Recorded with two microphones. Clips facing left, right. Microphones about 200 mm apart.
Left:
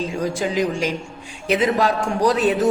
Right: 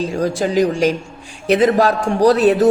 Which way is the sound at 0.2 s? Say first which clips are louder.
Right 6 dB; 35° right (ahead or behind).